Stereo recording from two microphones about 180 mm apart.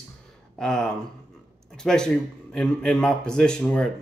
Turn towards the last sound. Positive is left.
turn(degrees=5)  # may be behind; listen again after turning